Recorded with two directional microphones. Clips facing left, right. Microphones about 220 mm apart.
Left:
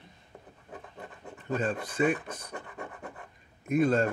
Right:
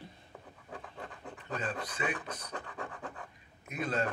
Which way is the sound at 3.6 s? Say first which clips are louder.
Left 10 dB; 50° left (ahead or behind).